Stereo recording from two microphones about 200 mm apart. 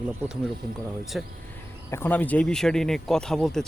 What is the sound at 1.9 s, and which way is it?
Speech, 10° left (ahead or behind).